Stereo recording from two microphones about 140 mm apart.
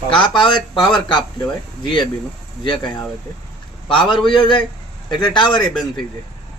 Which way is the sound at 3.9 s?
35° left (ahead or behind).